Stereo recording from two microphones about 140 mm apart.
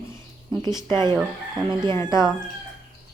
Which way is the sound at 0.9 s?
30° right (ahead or behind).